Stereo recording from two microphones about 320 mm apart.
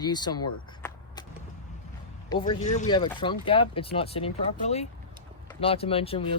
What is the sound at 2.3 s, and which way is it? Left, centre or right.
Speech, centre.